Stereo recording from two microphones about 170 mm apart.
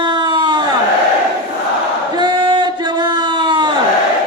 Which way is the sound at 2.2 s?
25° right (ahead or behind).